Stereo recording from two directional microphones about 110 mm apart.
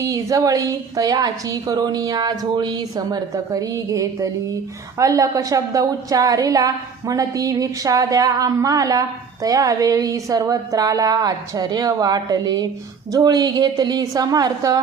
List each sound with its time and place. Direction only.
0.0 s a woman's voice: 30° right (ahead or behind)